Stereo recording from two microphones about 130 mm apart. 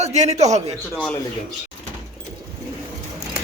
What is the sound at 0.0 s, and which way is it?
Speech, 60° right (ahead or behind).